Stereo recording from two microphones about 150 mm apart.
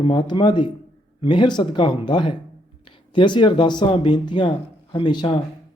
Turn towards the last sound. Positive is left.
turn(degrees=30)  # may be behind; listen again after turning